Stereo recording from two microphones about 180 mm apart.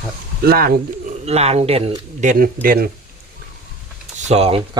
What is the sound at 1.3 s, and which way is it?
A man's voice, 35° right (ahead or behind).